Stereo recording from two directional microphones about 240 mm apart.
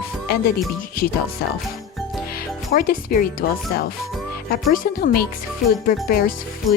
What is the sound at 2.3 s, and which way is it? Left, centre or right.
Speech, left.